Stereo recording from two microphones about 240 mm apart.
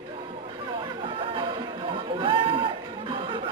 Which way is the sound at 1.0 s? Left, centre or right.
Right.